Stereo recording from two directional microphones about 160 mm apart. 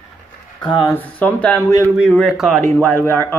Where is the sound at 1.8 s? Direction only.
5° right (ahead or behind).